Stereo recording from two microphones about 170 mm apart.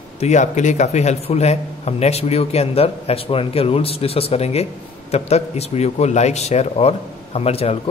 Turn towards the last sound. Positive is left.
turn(degrees=35)  # may be behind; listen again after turning